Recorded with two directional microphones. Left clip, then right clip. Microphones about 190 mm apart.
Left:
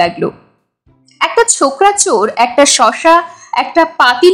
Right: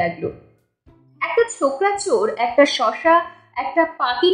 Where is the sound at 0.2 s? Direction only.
35° left (ahead or behind).